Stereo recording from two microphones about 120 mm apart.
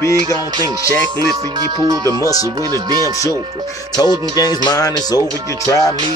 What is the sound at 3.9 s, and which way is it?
Speech, 35° left (ahead or behind).